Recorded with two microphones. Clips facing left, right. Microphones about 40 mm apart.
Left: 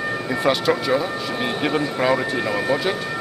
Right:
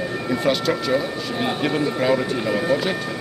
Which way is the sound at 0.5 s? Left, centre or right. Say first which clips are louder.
Left 2 dB; centre.